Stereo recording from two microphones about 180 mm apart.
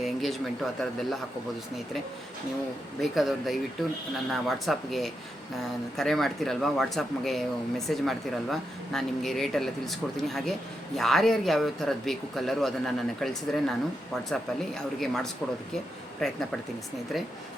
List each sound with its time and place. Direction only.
0.0 s speech: centre (ahead or behind)
3.0 s speech: centre (ahead or behind)